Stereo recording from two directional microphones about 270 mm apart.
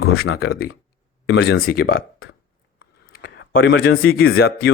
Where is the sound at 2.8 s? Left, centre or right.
Left.